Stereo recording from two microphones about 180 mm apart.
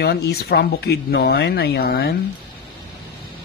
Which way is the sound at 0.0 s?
65° left (ahead or behind).